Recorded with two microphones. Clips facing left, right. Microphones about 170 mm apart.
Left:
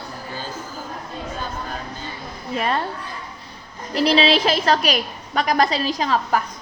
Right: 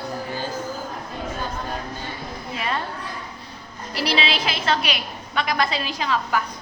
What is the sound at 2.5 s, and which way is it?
Speech, 45° left (ahead or behind).